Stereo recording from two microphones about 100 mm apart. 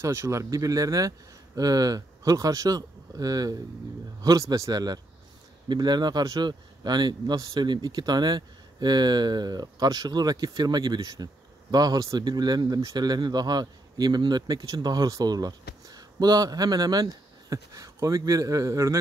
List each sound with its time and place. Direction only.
0.0 s speech: 30° right (ahead or behind)